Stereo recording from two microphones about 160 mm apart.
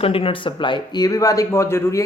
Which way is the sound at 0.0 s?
35° left (ahead or behind).